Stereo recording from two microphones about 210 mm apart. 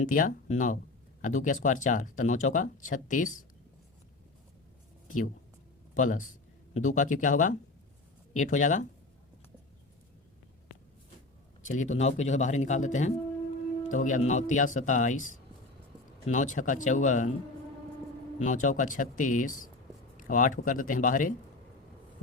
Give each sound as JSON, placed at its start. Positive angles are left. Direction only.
{"t": 0.0, "sound": "speech", "side_deg": 40}
{"t": 5.9, "sound": "speech", "side_deg": 35}
{"t": 11.6, "sound": "speech", "side_deg": 35}
{"t": 18.3, "sound": "speech", "side_deg": 35}